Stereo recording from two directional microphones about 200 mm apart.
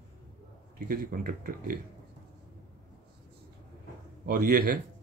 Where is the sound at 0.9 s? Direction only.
45° right (ahead or behind).